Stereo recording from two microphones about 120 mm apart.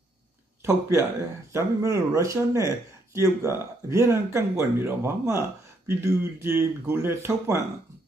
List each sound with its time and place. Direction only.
0.7 s speech: 25° right (ahead or behind)